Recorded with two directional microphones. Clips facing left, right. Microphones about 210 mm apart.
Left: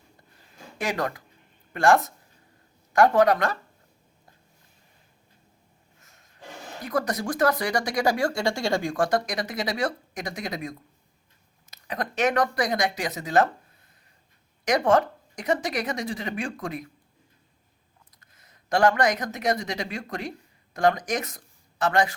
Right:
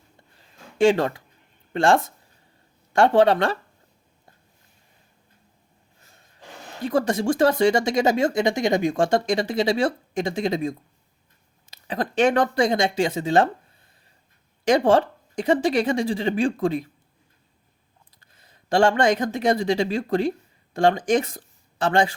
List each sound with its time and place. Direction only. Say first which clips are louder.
0.8 s speech: right 10 dB; 25° right (ahead or behind)
6.0 s snort: right 4 dB; 30° right (ahead or behind)
6.8 s speech: right 6 dB; 25° right (ahead or behind)
14.6 s speech: right 4 dB; 30° right (ahead or behind)
18.1 s speech: right 2 dB; 30° right (ahead or behind)